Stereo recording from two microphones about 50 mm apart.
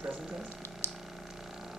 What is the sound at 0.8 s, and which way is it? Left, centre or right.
Squish, left.